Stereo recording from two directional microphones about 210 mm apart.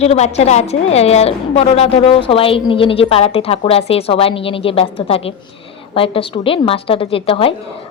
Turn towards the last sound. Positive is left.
turn(degrees=25)  # may be behind; listen again after turning